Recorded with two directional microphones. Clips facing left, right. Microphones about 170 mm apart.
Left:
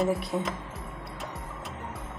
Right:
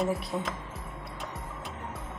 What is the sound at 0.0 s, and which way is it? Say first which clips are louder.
Speech: left 3 dB; centre (ahead or behind).